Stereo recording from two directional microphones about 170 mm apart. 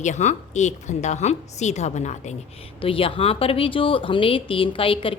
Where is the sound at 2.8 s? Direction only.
35° left (ahead or behind).